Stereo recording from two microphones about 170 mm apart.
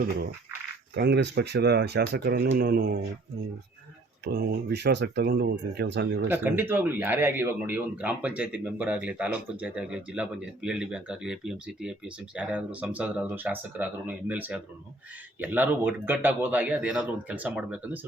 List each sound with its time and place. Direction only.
0.9 s speech: 80° right
4.2 s speech: 75° right (ahead or behind)
6.2 s speech: 10° right (ahead or behind)